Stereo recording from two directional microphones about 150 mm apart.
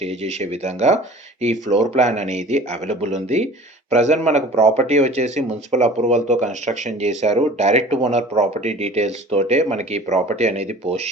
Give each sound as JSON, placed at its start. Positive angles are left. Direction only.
{"t": 0.0, "sound": "speech", "side_deg": -50}